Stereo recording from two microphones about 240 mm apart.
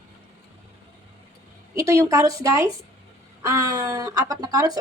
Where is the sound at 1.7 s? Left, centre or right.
Centre.